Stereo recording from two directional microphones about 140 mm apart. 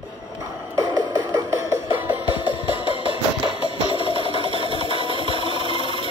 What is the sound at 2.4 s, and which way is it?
Music, 40° left (ahead or behind).